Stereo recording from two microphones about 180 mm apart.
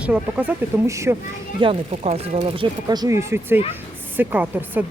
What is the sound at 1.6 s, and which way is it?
Speech, 35° right (ahead or behind).